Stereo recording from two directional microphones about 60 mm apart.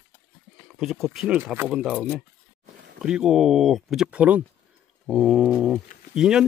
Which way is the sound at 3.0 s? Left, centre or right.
Centre.